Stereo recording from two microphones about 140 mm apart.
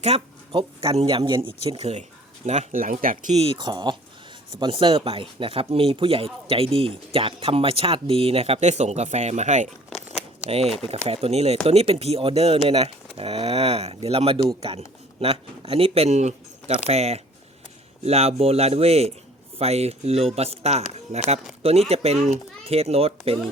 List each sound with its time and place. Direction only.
0.0 s speech: 45° right (ahead or behind)
2.7 s speech: 80° right
3.3 s speech: 45° right (ahead or behind)
3.6 s speech: 30° right (ahead or behind); by 9.6 s 55° right (ahead or behind)
9.9 s a sound: 50° left (ahead or behind)
10.8 s speech: 45° right (ahead or behind)